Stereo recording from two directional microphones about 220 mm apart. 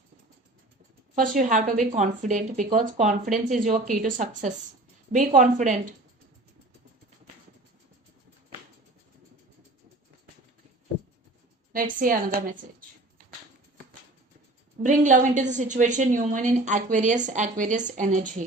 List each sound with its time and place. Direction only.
1.1 s a woman's voice: 35° right (ahead or behind)
11.7 s a woman's voice: 35° right (ahead or behind)
14.8 s a woman's voice: 35° right (ahead or behind)